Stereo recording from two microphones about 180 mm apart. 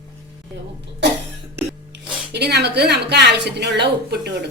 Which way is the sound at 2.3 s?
65° right (ahead or behind).